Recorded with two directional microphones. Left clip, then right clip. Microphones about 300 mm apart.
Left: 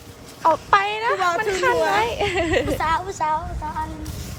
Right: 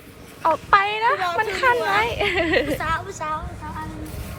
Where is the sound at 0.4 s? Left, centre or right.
Centre.